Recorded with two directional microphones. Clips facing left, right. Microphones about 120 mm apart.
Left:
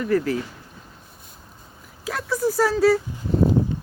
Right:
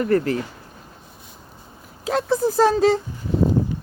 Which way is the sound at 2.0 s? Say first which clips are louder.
Right 4 dB; 30° right (ahead or behind).